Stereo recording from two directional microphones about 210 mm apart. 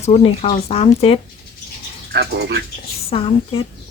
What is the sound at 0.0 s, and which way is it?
Speech, 30° left (ahead or behind).